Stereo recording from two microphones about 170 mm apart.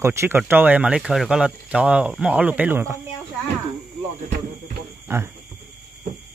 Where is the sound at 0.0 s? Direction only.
15° right (ahead or behind).